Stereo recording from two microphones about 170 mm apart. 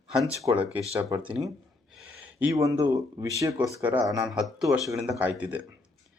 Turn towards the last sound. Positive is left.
turn(degrees=-10)  # may be behind; listen again after turning